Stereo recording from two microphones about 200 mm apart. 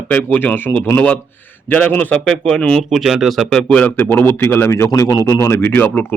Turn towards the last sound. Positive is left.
turn(degrees=10)  # may be behind; listen again after turning